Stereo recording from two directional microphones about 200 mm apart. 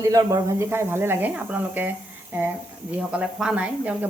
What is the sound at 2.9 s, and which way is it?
Speech, 5° right (ahead or behind).